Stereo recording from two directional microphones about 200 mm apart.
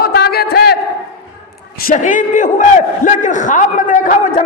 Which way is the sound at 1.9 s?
40° left (ahead or behind).